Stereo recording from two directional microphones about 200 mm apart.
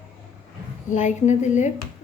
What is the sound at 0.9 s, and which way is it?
Speech, 35° left (ahead or behind).